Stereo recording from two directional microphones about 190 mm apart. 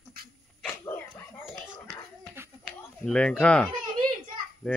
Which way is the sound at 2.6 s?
5° left (ahead or behind).